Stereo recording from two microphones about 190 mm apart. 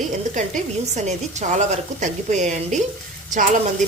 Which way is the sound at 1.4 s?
40° right (ahead or behind).